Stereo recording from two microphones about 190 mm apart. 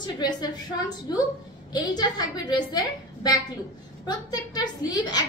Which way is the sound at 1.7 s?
20° left (ahead or behind).